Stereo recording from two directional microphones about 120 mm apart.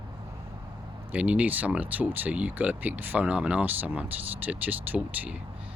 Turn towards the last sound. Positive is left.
turn(degrees=-15)  # may be behind; listen again after turning